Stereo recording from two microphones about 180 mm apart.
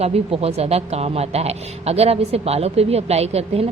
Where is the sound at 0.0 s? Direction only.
35° right (ahead or behind).